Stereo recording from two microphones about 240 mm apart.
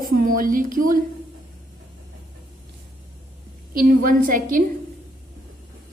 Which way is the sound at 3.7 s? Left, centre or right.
Right.